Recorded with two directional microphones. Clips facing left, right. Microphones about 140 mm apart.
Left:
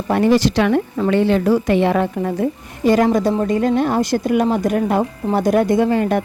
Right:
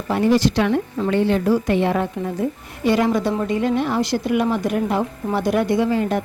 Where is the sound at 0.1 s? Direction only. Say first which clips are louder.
Left 2 dB; 70° left (ahead or behind); by 2.3 s 85° left.